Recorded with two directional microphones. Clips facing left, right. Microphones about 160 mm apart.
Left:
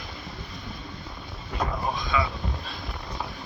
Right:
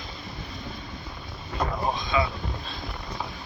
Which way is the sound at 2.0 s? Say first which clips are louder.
Right 1 dB; 25° right (ahead or behind).